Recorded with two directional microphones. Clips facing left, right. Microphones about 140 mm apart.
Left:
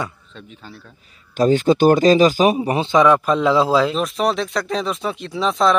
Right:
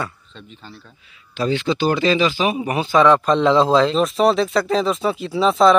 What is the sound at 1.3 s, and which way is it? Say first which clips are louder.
A man's voice: left 6 dB; 45° left (ahead or behind).